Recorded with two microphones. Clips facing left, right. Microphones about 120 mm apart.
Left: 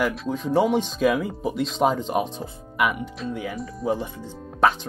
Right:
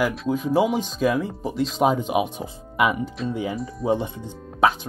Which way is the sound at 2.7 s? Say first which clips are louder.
Right 3 dB; 25° right (ahead or behind).